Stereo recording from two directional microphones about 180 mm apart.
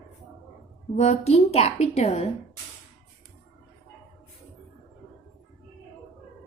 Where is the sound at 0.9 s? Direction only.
35° left (ahead or behind).